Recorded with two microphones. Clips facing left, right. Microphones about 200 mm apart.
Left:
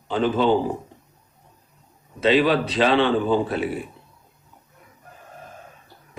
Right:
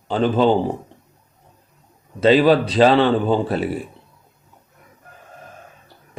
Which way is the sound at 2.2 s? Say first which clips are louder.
Right 5 dB; 40° right (ahead or behind).